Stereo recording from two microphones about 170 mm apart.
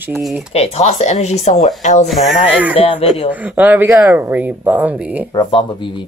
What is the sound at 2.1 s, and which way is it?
Speech, 5° right (ahead or behind).